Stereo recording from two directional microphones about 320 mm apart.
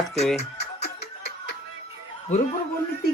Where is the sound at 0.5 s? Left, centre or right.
Left.